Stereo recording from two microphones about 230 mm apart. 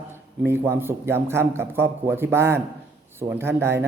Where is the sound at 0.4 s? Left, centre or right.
Centre.